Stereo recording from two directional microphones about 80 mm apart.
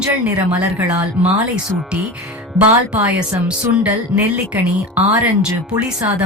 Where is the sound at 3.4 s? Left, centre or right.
Centre.